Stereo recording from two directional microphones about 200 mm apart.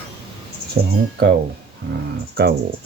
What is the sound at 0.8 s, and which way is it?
Speech, 45° right (ahead or behind).